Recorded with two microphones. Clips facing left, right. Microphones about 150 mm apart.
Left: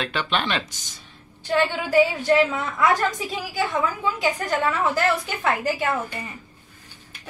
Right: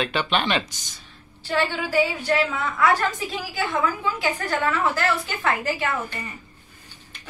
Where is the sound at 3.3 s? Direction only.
10° left (ahead or behind).